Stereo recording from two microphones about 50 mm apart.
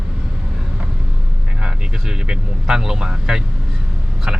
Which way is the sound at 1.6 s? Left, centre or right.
Centre.